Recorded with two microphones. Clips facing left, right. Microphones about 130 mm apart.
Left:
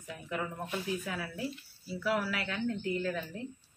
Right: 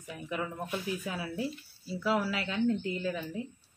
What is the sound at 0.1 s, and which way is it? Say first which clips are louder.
A woman's voice: right 1 dB; 15° right (ahead or behind).